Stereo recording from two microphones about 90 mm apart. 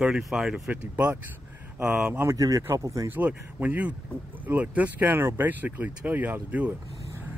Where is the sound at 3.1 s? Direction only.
15° right (ahead or behind).